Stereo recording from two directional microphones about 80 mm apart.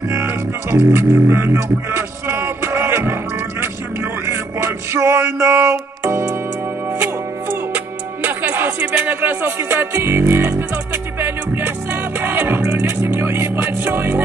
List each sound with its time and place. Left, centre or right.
0.1 s music: right
7.7 s music: right